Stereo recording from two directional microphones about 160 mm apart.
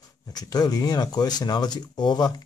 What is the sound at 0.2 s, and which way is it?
Speech, 25° left (ahead or behind).